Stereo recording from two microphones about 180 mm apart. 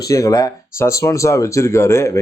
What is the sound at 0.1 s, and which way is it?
Speech, 20° left (ahead or behind).